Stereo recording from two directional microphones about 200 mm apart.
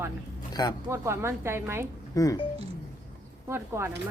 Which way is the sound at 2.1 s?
15° left (ahead or behind).